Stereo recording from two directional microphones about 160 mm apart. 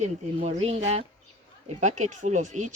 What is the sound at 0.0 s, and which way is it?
Speech, 45° right (ahead or behind).